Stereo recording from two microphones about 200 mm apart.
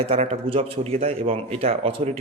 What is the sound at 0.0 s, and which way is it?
A man's voice, 30° right (ahead or behind).